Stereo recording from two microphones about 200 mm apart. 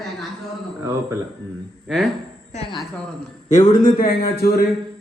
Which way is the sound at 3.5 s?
40° left (ahead or behind).